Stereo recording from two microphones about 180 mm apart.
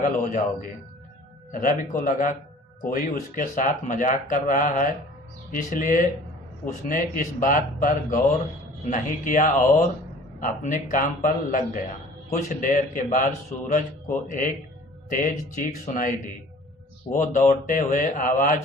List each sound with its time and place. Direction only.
0.0 s speech: 50° left (ahead or behind)
1.5 s speech: 50° left (ahead or behind)